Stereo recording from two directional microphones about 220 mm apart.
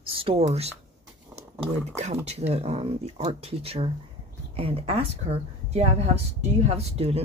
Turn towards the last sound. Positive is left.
turn(degrees=-25)  # may be behind; listen again after turning